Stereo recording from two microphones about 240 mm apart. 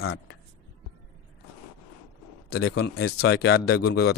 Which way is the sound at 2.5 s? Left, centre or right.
Left.